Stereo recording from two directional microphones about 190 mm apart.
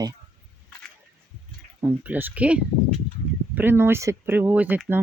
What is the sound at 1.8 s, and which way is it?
Speech, 10° right (ahead or behind).